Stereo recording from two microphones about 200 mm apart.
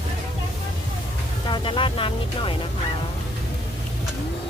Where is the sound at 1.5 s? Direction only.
25° left (ahead or behind).